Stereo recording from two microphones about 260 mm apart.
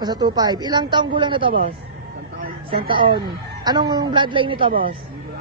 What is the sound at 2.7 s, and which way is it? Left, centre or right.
A woman's voice, centre.